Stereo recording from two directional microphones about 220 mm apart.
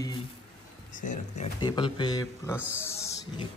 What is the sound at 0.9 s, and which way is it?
Speech, 35° left (ahead or behind).